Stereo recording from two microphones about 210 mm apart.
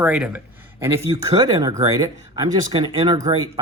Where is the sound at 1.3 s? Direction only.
20° right (ahead or behind).